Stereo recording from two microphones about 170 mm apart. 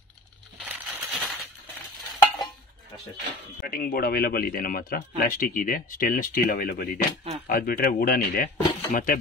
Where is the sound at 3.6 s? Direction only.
60° left (ahead or behind).